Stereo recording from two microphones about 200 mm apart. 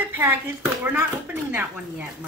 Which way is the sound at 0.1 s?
10° right (ahead or behind).